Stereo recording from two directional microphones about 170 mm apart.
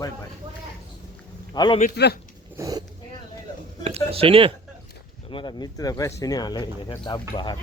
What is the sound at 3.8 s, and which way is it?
Speech, 35° right (ahead or behind).